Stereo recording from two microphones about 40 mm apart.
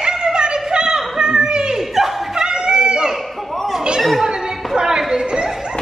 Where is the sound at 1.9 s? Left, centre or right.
Centre.